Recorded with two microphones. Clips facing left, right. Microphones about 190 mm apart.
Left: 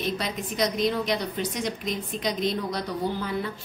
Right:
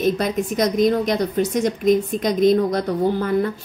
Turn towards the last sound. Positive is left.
turn(degrees=-50)  # may be behind; listen again after turning